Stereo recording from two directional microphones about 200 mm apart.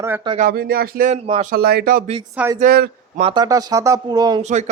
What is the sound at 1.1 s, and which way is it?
Speech, 35° right (ahead or behind).